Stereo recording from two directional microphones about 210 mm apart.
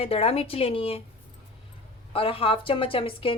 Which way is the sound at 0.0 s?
30° left (ahead or behind).